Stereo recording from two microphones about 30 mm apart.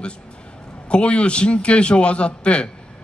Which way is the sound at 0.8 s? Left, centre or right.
Left.